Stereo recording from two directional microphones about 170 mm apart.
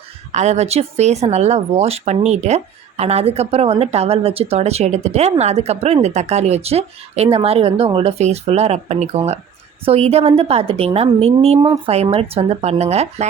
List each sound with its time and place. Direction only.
0.3 s speech: 40° right (ahead or behind)